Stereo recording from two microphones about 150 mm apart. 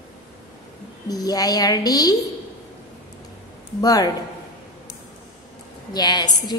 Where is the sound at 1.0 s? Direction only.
25° left (ahead or behind).